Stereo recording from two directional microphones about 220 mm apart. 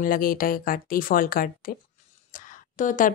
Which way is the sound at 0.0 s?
40° left (ahead or behind).